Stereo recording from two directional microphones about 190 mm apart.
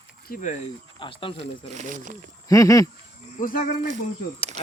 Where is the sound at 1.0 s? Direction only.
25° left (ahead or behind).